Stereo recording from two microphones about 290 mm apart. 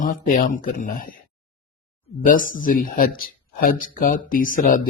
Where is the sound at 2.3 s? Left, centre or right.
Left.